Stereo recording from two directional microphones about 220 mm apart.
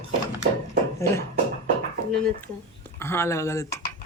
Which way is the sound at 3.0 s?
10° left (ahead or behind).